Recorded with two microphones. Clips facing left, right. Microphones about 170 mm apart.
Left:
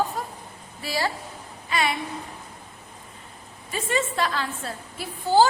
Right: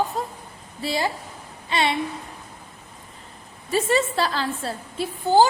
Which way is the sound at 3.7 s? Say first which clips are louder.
Right 5 dB; 35° right (ahead or behind).